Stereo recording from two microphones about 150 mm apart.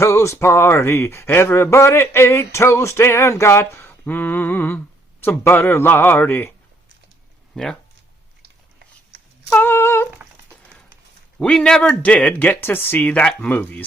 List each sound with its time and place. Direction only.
0.0 s speech: 20° left (ahead or behind)
7.5 s speech: 5° left (ahead or behind)
9.5 s speech: 15° left (ahead or behind)
11.3 s speech: 5° left (ahead or behind)